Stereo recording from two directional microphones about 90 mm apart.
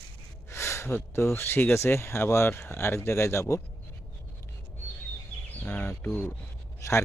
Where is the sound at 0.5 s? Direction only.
30° left (ahead or behind).